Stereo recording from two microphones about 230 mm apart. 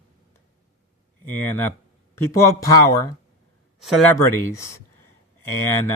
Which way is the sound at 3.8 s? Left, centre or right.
Centre.